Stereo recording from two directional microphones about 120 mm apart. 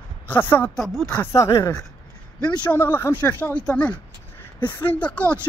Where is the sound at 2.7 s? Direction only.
20° left (ahead or behind).